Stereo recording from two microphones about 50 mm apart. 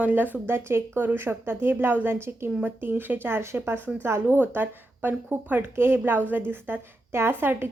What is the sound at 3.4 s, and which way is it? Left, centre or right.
Speech, right.